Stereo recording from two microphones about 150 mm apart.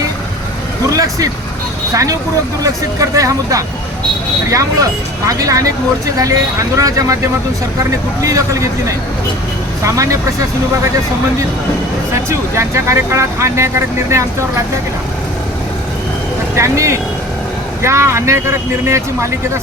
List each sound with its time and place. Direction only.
0.9 s vehicle: 20° right (ahead or behind)
1.9 s speech: 20° right (ahead or behind)
8.2 s speech: 20° right (ahead or behind)
9.8 s speech: 20° right (ahead or behind)
12.3 s speech: 20° right (ahead or behind)
16.6 s speech: 20° right (ahead or behind)